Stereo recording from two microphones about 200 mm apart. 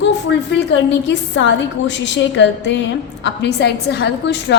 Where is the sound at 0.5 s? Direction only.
60° left (ahead or behind).